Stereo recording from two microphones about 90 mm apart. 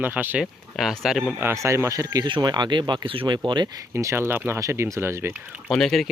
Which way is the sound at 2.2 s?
55° right (ahead or behind).